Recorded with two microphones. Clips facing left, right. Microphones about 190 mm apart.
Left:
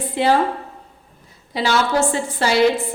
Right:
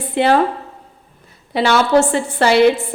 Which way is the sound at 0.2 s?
60° right (ahead or behind).